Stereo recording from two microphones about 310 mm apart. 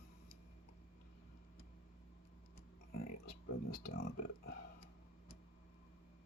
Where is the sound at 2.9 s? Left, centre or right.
Left.